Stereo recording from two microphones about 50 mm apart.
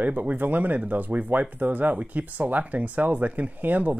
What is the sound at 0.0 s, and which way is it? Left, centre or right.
Speech, right.